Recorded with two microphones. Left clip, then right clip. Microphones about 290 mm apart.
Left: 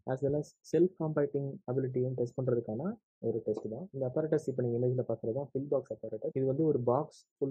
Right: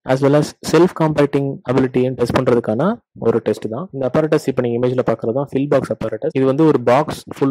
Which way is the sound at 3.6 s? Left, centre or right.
Right.